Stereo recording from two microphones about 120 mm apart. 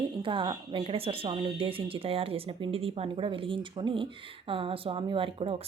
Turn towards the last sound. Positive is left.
turn(degrees=-45)  # may be behind; listen again after turning